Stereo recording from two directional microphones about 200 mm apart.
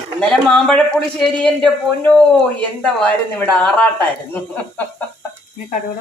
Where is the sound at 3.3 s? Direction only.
5° left (ahead or behind).